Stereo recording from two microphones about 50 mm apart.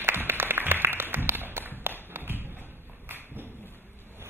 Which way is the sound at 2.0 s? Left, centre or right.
Right.